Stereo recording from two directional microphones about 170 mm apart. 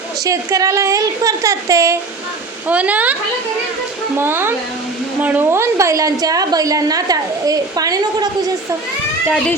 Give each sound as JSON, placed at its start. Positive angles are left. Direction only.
{"t": 0.3, "sound": "a woman's voice", "side_deg": -20}
{"t": 4.2, "sound": "a woman's voice", "side_deg": -15}